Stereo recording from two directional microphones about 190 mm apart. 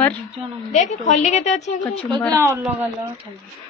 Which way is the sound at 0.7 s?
40° left (ahead or behind).